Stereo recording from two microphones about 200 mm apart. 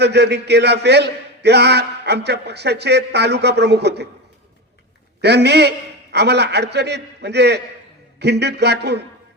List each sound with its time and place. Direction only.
0.0 s a man's voice: 55° right (ahead or behind)
5.2 s a man's voice: 55° right (ahead or behind)